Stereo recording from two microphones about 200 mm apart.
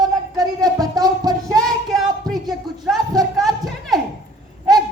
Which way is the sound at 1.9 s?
Centre (ahead or behind).